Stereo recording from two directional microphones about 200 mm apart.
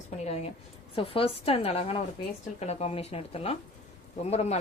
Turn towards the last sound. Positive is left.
turn(degrees=35)  # may be behind; listen again after turning